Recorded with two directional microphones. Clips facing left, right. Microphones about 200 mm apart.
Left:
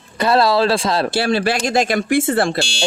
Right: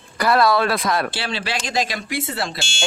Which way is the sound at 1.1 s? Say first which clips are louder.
Left 9 dB; 45° left (ahead or behind).